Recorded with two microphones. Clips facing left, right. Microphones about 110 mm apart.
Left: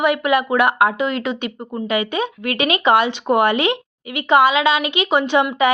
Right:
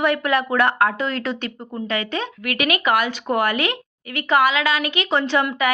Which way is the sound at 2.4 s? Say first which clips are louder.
Left 3 dB; 25° left (ahead or behind).